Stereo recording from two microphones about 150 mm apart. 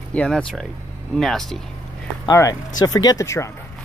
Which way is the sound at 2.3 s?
20° left (ahead or behind).